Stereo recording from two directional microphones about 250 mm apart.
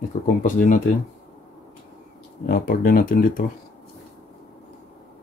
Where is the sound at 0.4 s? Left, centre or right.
Left.